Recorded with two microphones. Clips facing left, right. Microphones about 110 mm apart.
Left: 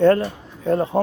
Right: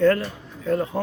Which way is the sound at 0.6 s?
30° left (ahead or behind).